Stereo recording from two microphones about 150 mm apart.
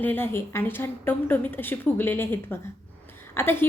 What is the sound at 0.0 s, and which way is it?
A woman's voice, 15° left (ahead or behind).